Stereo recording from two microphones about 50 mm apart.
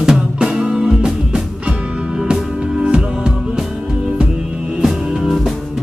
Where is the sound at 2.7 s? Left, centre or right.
Centre.